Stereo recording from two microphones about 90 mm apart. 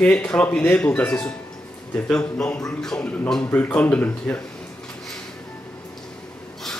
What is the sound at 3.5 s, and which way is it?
Speech, 20° left (ahead or behind).